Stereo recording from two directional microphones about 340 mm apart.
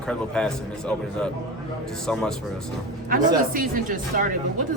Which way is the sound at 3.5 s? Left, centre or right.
Right.